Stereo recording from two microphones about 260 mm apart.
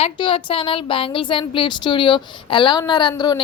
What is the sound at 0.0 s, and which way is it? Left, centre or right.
A woman's voice, centre.